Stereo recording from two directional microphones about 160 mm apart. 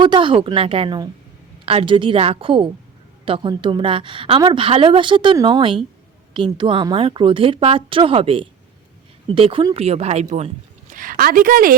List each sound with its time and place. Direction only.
0.0 s a woman's voice: 30° right (ahead or behind); by 11.7 s 60° right (ahead or behind)